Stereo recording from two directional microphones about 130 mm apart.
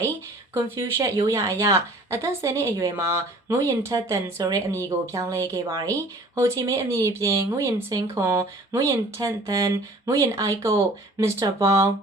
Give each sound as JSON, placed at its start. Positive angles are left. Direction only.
{"t": 0.5, "sound": "speech", "side_deg": -20}